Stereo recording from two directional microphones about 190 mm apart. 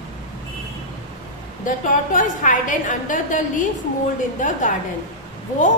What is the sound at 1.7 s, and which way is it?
A woman's voice, 45° left (ahead or behind).